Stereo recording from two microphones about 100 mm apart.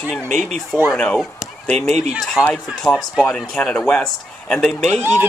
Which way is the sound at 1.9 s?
90° right.